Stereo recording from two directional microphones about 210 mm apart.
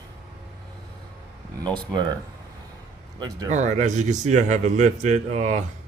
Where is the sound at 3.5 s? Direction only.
35° right (ahead or behind).